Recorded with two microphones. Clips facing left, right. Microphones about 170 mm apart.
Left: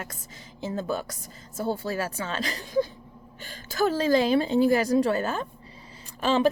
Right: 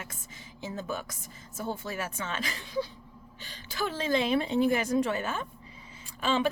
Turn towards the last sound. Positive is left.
turn(degrees=40)  # may be behind; listen again after turning